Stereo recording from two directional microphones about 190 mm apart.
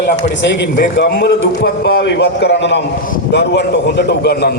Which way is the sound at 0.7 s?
60° left (ahead or behind).